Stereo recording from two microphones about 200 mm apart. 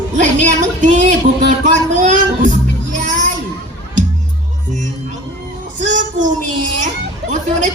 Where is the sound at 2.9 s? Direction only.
40° right (ahead or behind).